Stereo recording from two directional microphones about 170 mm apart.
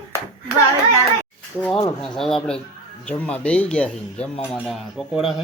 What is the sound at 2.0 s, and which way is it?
Speech, centre (ahead or behind).